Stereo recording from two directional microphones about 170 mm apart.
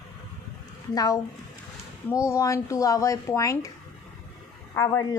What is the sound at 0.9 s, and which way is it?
A woman's voice, 20° left (ahead or behind).